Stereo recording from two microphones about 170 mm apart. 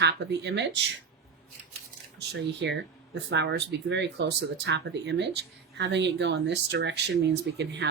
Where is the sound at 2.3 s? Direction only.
90° right.